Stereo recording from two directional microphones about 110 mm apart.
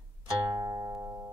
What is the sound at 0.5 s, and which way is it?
Music, 40° right (ahead or behind).